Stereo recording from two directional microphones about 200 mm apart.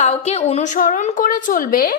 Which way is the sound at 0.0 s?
30° left (ahead or behind).